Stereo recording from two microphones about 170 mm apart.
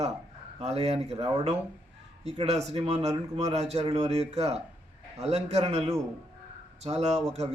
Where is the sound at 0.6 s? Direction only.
40° right (ahead or behind).